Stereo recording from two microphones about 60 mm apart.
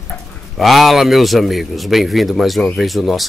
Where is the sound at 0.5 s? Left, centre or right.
Centre.